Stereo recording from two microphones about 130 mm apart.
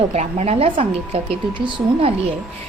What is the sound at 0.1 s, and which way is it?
A woman's voice, 55° right (ahead or behind).